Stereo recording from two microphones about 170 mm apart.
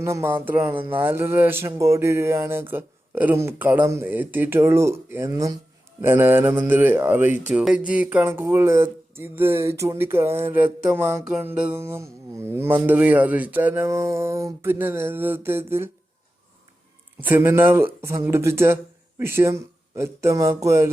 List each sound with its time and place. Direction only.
0.0 s speech: 15° right (ahead or behind)
17.2 s speech: 10° right (ahead or behind)